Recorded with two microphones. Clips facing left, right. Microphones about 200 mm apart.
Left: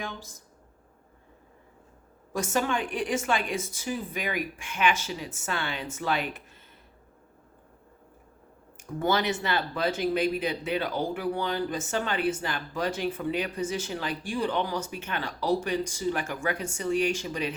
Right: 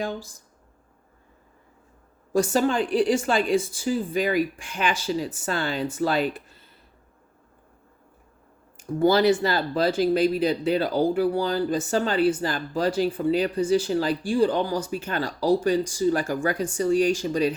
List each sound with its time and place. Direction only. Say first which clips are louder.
0.0 s speech: right 8 dB; 35° right (ahead or behind)
2.3 s speech: right 6 dB; 35° right (ahead or behind)
8.8 s speech: right 8 dB; 35° right (ahead or behind)